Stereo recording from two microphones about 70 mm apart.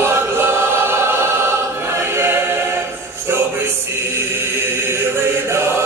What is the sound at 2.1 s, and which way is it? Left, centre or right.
Choir, right.